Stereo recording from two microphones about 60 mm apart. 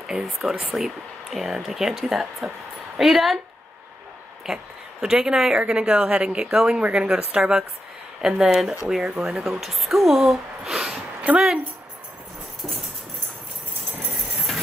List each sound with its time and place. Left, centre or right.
0.0 s speech: centre
4.4 s a woman's voice: centre; by 6.2 s right
6.2 s speech: centre
8.2 s speech: centre
14.1 s a sound: centre